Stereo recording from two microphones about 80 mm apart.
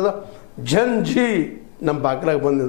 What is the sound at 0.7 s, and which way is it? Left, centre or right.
A man's voice, left.